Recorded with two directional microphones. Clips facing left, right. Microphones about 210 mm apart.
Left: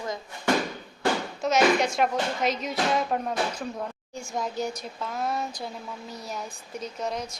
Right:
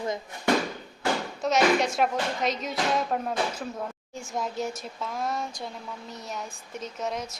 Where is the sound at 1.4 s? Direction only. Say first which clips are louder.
Left 1 dB; centre (ahead or behind).